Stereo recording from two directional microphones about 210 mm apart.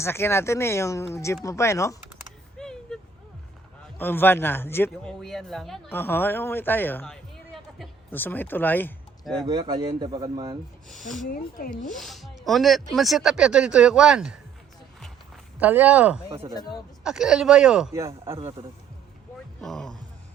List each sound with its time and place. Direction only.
0.0 s speech: 10° left (ahead or behind)
2.6 s a sound: 5° left (ahead or behind)
3.9 s speech: 10° left (ahead or behind)
9.5 s a man's voice: 20° right (ahead or behind)
11.3 s speech: 40° left (ahead or behind)
11.9 s speech: centre (ahead or behind)
15.5 s speech: 10° right (ahead or behind)
16.6 s speech: 20° left (ahead or behind)
17.0 s speech: 5° right (ahead or behind)
19.6 s speech: centre (ahead or behind)